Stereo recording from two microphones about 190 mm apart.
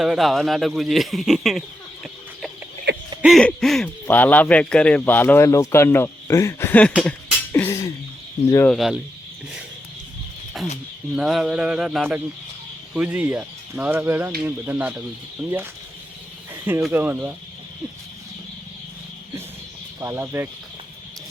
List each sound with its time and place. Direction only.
0.0 s speech: centre (ahead or behind)
3.2 s speech: centre (ahead or behind)
6.9 s a sound: centre (ahead or behind)
7.5 s a sound: 15° left (ahead or behind)
8.4 s speech: 15° left (ahead or behind)
8.7 s speech: centre (ahead or behind)
10.5 s a sound: centre (ahead or behind)
11.1 s speech: centre (ahead or behind)
16.8 s speech: 10° right (ahead or behind)
20.0 s speech: 15° right (ahead or behind)